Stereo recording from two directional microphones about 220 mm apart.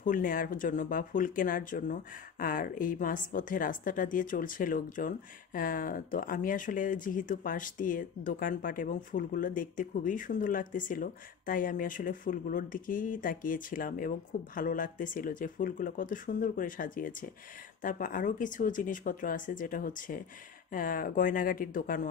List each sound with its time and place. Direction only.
0.0 s speech: 40° left (ahead or behind)